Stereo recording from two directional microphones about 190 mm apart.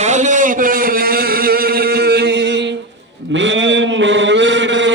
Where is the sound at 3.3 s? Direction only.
75° right (ahead or behind).